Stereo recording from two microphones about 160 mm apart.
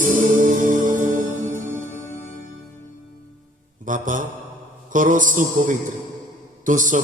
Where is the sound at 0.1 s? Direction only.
55° right (ahead or behind).